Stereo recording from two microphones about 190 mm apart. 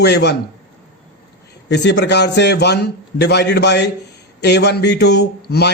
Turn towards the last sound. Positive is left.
turn(degrees=60)  # may be behind; listen again after turning